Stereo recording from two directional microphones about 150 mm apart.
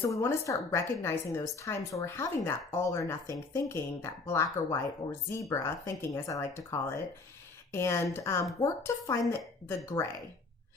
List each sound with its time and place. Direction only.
0.1 s speech: 20° left (ahead or behind)